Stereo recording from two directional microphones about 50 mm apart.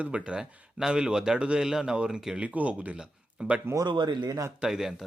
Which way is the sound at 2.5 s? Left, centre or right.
Right.